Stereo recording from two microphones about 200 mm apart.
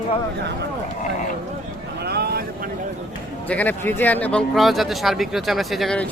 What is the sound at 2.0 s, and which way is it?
Vehicle, 55° right (ahead or behind).